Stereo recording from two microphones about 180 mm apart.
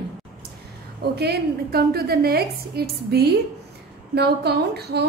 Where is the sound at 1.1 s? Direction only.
65° right (ahead or behind).